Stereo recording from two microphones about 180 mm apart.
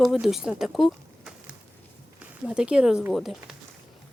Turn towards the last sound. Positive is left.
turn(degrees=0)  # may be behind; listen again after turning